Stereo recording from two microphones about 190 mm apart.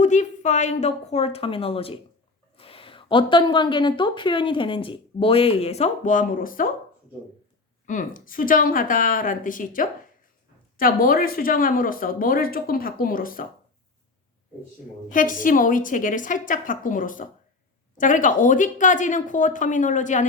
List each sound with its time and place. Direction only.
0.0 s a woman's voice: 40° left (ahead or behind)
7.9 s speech: 45° left (ahead or behind)
15.1 s speech: 45° left (ahead or behind)